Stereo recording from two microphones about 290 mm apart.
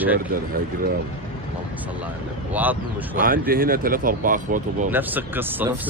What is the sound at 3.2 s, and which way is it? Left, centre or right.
Speech, right.